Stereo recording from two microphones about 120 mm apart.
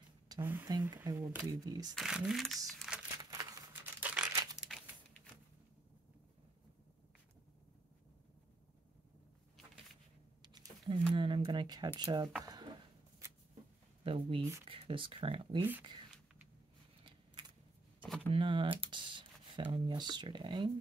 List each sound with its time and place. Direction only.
0.4 s speech: 15° right (ahead or behind)
0.7 s speech: 30° right (ahead or behind)
1.1 s speech: 20° right (ahead or behind)
1.5 s speech: 35° right (ahead or behind)
2.0 s speech: 5° right (ahead or behind)
3.2 s a sound: 30° right (ahead or behind)
4.0 s crumpling: 10° right (ahead or behind)
4.7 s a sound: centre (ahead or behind)
10.4 s a sound: 35° right (ahead or behind)
12.0 s speech: 35° right (ahead or behind)
14.0 s speech: 50° right (ahead or behind)
18.0 s a sound: 5° left (ahead or behind)
18.3 s speech: 45° right (ahead or behind)